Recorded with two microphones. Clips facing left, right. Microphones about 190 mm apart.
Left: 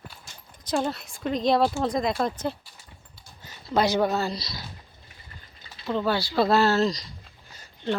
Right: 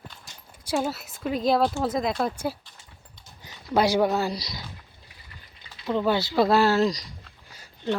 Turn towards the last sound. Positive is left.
turn(degrees=-10)  # may be behind; listen again after turning